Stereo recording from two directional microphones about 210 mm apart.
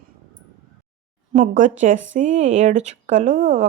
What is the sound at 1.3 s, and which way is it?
Speech, 35° right (ahead or behind).